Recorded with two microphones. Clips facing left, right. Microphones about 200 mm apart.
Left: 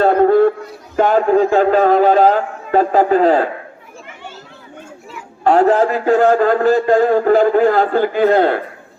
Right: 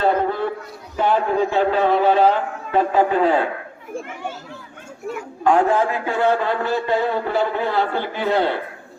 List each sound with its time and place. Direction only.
0.0 s a sound: 50° left (ahead or behind)
0.9 s a man's voice: 45° left (ahead or behind)
5.5 s a man's voice: 40° left (ahead or behind)